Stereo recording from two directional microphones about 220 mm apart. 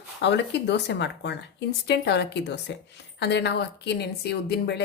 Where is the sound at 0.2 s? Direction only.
50° left (ahead or behind).